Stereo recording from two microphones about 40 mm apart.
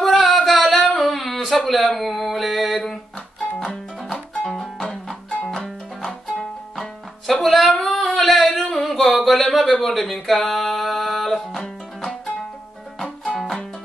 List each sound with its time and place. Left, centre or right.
0.0 s music: centre
0.9 s a sound: centre
3.5 s music: centre
6.7 s music: centre
7.4 s a sound: centre
7.7 s singing: centre
8.8 s a sound: centre
10.2 s music: centre
13.0 s music: centre